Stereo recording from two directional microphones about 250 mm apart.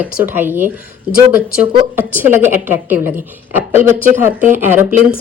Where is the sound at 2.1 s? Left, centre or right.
Centre.